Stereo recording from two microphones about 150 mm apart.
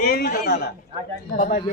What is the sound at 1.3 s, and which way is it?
Speech, 70° left (ahead or behind).